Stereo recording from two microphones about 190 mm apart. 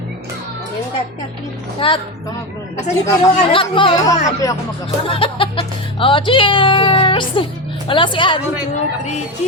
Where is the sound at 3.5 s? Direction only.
25° left (ahead or behind).